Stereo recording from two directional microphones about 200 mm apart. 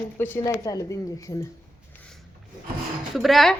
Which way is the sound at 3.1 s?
Centre (ahead or behind).